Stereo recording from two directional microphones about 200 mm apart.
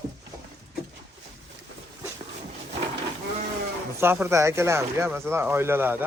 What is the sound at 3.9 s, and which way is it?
Speech, 10° right (ahead or behind).